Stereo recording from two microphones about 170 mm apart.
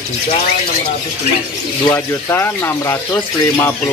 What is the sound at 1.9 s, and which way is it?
Speech, 15° left (ahead or behind).